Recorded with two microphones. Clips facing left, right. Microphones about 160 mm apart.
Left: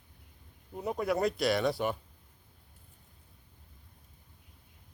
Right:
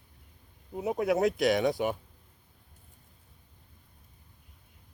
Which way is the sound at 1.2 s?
20° right (ahead or behind).